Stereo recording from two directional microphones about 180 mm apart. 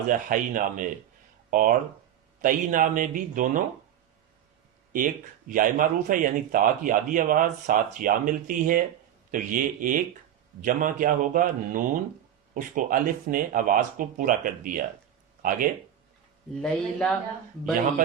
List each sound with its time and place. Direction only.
0.1 s speech: 50° right (ahead or behind)
4.9 s speech: 50° right (ahead or behind)
16.6 s speech: 5° left (ahead or behind)